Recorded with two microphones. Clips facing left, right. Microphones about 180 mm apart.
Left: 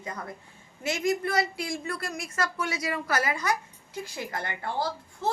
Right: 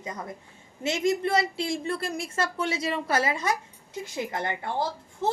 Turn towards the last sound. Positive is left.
turn(degrees=-20)  # may be behind; listen again after turning